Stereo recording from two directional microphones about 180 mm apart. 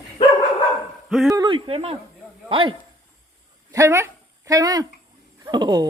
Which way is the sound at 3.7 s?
15° right (ahead or behind).